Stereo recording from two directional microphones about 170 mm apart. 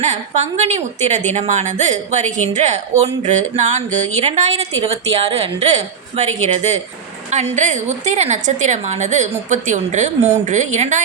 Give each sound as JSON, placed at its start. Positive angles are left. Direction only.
{"t": 0.0, "sound": "a woman's voice", "side_deg": -45}